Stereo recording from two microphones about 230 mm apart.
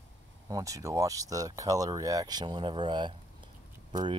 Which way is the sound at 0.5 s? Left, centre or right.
Centre.